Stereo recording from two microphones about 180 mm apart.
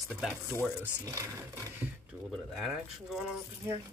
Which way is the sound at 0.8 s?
15° right (ahead or behind).